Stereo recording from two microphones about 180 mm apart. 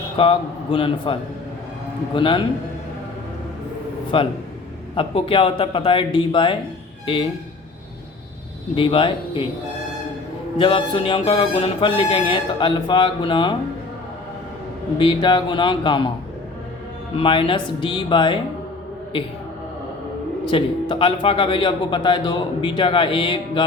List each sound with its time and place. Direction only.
0.2 s a man's voice: 30° left (ahead or behind)
4.1 s a man's voice: 30° left (ahead or behind)
8.7 s a man's voice: 30° left (ahead or behind)
10.6 s a man's voice: 30° left (ahead or behind)
14.9 s a man's voice: 25° left (ahead or behind)
17.2 s a man's voice: 30° left (ahead or behind)
20.4 s a man's voice: 25° left (ahead or behind)